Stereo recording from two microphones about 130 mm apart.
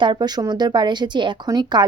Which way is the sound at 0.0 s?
35° right (ahead or behind).